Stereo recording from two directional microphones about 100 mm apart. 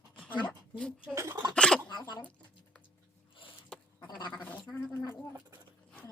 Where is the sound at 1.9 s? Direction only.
45° left (ahead or behind).